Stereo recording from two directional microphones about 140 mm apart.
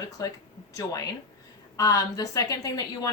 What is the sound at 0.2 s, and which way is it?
A woman's voice, 30° left (ahead or behind).